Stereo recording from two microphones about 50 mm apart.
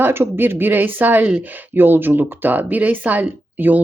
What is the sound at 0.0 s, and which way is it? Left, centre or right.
A woman's voice, right.